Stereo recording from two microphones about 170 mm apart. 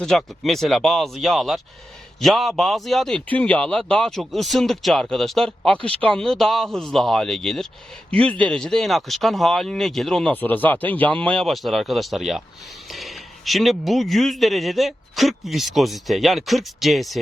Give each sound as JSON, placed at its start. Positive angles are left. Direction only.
{"t": 0.0, "sound": "speech", "side_deg": 5}